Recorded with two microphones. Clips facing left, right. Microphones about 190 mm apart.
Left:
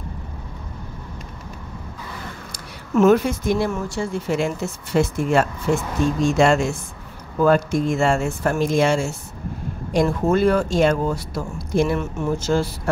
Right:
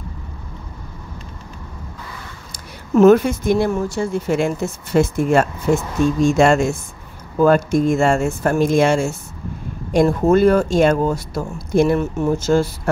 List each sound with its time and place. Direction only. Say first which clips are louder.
2.9 s speech: right 4 dB; 40° right (ahead or behind)